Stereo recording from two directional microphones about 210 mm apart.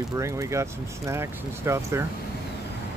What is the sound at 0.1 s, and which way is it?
Speech, 15° right (ahead or behind).